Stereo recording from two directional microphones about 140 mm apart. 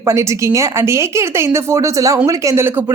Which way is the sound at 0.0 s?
20° right (ahead or behind).